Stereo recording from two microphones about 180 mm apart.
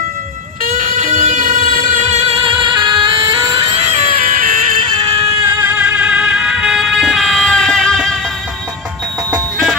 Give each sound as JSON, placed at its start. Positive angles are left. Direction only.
{"t": 0.7, "sound": "music", "side_deg": -45}
{"t": 3.8, "sound": "music", "side_deg": -40}
{"t": 5.1, "sound": "music", "side_deg": -15}